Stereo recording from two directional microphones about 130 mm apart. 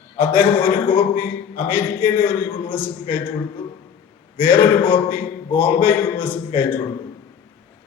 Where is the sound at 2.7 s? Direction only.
15° left (ahead or behind).